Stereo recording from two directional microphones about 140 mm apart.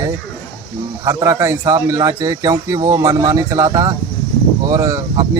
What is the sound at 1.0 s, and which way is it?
Speech, 20° right (ahead or behind).